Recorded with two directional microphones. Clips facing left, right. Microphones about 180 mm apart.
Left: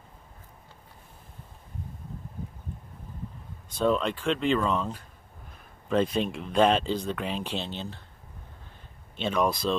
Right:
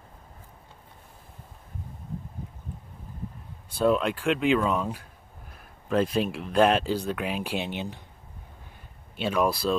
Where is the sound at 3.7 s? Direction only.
5° right (ahead or behind).